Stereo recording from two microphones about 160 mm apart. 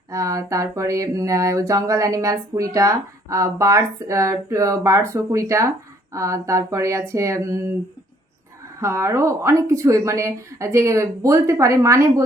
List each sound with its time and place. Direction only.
0.1 s speech: 20° right (ahead or behind)
8.8 s speech: 20° right (ahead or behind)